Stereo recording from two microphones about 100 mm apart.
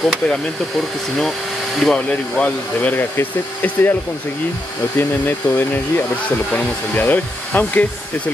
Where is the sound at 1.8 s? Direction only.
10° left (ahead or behind).